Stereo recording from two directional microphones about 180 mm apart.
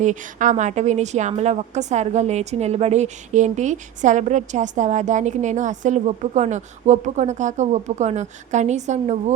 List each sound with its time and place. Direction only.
0.0 s a woman's voice: 45° right (ahead or behind)